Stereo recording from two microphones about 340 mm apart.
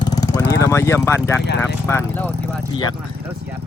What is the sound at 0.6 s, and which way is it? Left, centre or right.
Speech, centre.